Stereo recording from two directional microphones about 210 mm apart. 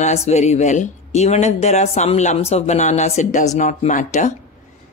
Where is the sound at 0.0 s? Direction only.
30° left (ahead or behind).